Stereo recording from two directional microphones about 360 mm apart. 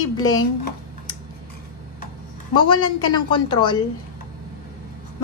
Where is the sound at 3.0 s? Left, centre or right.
Centre.